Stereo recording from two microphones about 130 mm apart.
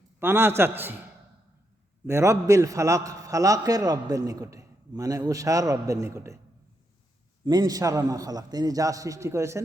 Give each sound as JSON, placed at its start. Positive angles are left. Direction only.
{"t": 0.2, "sound": "a man's voice", "side_deg": -15}
{"t": 2.0, "sound": "a man's voice", "side_deg": -20}
{"t": 7.4, "sound": "a man's voice", "side_deg": -35}